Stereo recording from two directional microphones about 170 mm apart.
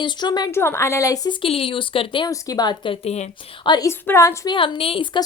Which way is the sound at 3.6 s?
20° left (ahead or behind).